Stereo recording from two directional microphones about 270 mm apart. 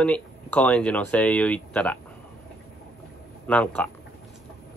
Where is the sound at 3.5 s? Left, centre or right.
Centre.